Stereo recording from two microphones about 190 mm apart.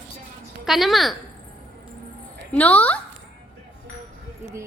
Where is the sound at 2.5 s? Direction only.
10° left (ahead or behind).